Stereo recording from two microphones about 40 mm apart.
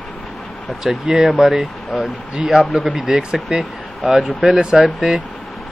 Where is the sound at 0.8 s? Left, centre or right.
Centre.